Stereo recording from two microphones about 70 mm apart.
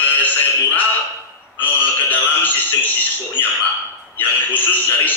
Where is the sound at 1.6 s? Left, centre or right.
Left.